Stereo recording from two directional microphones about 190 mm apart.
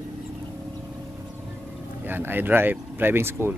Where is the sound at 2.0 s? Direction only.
10° right (ahead or behind).